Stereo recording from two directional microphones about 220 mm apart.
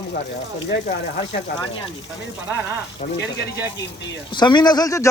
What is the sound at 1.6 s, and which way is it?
Speech, 20° left (ahead or behind).